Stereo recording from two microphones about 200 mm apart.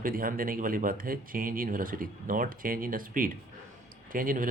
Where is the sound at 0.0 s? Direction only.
45° right (ahead or behind).